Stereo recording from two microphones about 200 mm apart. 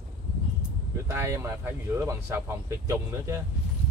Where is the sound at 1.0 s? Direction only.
15° right (ahead or behind).